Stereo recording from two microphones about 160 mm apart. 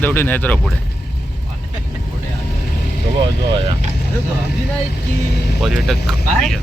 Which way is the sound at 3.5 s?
30° right (ahead or behind).